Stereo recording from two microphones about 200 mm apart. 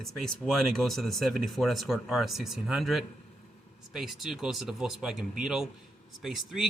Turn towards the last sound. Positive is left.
turn(degrees=0)  # may be behind; listen again after turning